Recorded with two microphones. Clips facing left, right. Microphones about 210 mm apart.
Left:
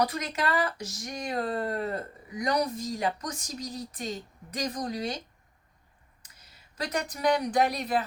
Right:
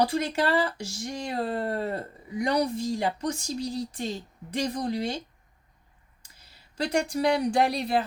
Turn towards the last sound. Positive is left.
turn(degrees=-30)  # may be behind; listen again after turning